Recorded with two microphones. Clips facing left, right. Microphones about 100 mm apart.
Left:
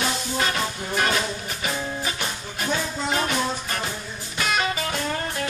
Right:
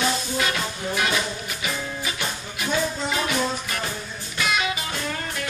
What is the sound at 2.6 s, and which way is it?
Music, 40° left (ahead or behind).